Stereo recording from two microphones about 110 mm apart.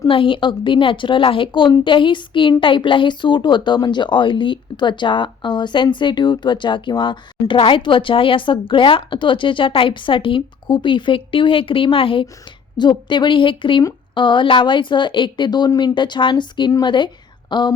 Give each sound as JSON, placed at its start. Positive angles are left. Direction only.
{"t": 0.1, "sound": "a woman's voice", "side_deg": 50}
{"t": 12.7, "sound": "a woman's voice", "side_deg": 40}